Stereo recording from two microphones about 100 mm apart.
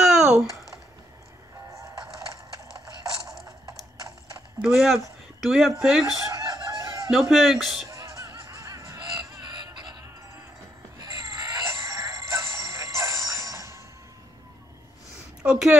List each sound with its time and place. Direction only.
0.0 s typing: 5° right (ahead or behind)
1.7 s music: 30° right (ahead or behind)
2.8 s a sound: 35° right (ahead or behind)
4.6 s a man's voice: 5° right (ahead or behind)
6.3 s chicken: 35° right (ahead or behind)
7.1 s a man's voice: 5° right (ahead or behind)
7.9 s music: 30° right (ahead or behind)
9.6 s a sound: 45° right (ahead or behind)
11.0 s music: 30° right (ahead or behind)
15.4 s a sound: 10° right (ahead or behind)